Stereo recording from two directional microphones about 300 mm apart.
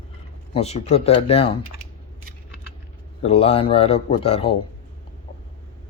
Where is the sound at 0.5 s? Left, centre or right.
Left.